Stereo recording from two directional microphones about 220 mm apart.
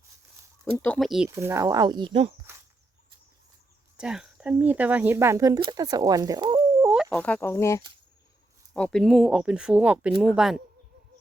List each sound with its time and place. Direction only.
0.6 s speech: 5° left (ahead or behind)
1.3 s speech: 10° right (ahead or behind)
3.9 s speech: 5° right (ahead or behind)
6.9 s speech: centre (ahead or behind)